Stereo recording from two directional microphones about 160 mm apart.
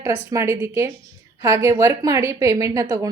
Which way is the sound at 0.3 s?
20° right (ahead or behind).